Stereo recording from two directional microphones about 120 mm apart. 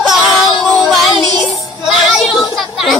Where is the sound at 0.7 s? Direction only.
Centre (ahead or behind).